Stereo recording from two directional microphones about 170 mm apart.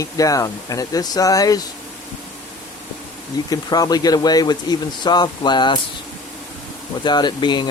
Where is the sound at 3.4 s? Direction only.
20° left (ahead or behind).